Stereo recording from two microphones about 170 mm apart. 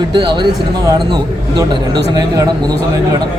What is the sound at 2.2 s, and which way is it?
Speech, 20° right (ahead or behind).